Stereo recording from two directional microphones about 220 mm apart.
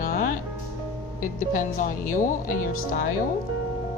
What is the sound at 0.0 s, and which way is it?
Music, 40° left (ahead or behind).